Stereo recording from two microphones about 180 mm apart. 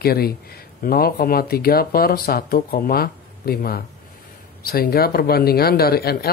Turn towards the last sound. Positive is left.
turn(degrees=60)  # may be behind; listen again after turning